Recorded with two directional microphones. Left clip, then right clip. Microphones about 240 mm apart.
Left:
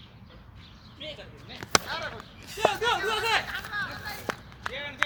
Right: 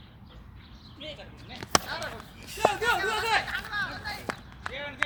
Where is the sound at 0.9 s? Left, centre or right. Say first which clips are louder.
Left 1 dB; centre.